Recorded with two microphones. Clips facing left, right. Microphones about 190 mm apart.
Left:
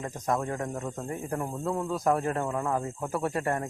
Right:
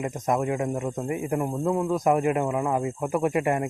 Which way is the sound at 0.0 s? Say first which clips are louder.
Right 4 dB; 20° right (ahead or behind).